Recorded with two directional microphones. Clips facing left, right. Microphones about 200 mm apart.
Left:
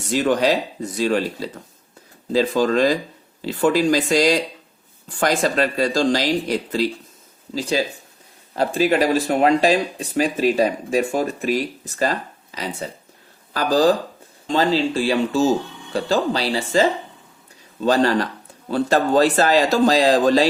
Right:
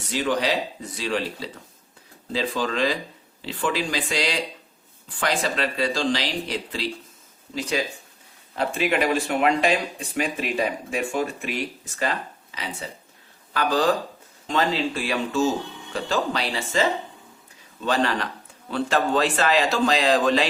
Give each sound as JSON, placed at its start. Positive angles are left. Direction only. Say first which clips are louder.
{"t": 0.1, "sound": "speech", "louder": "left 6 dB", "side_deg": 45}
{"t": 7.5, "sound": "speech", "louder": "left 4 dB", "side_deg": 35}
{"t": 17.8, "sound": "speech", "louder": "left 6 dB", "side_deg": 40}